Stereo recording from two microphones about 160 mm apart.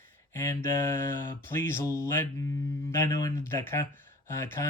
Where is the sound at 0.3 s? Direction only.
15° left (ahead or behind).